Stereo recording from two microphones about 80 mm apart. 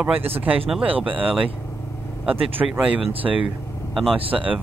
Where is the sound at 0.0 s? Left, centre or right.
Right.